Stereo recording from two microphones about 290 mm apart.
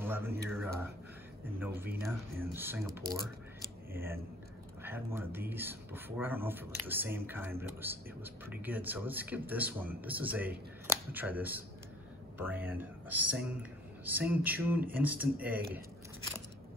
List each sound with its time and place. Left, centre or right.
0.0 s speech: centre
3.9 s speech: centre